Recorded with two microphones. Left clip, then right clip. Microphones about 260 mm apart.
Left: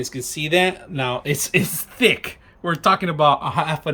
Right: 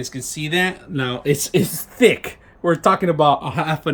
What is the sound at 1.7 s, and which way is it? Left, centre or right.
Speech, centre.